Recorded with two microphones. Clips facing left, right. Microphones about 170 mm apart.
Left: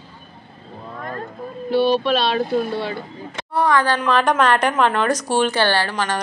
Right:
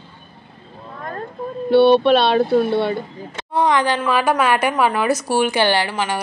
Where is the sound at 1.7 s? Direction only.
65° right (ahead or behind).